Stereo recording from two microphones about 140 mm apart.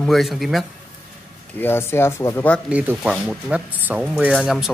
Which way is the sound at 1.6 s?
15° left (ahead or behind).